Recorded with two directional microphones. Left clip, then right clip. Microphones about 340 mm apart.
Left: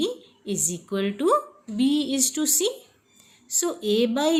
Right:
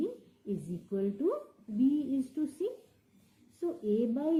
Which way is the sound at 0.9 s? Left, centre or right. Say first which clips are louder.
Left 10 dB; left.